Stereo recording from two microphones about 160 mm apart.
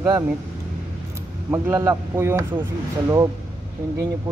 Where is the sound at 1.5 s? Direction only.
15° right (ahead or behind).